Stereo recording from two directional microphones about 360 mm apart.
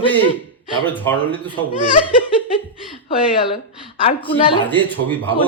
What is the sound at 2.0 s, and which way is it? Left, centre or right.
Speech, centre.